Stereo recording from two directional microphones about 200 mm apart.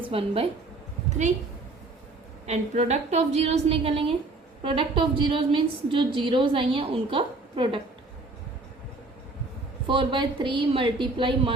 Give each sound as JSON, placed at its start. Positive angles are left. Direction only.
{"t": 0.0, "sound": "a woman's voice", "side_deg": -25}
{"t": 2.5, "sound": "a woman's voice", "side_deg": -35}
{"t": 9.8, "sound": "a woman's voice", "side_deg": -25}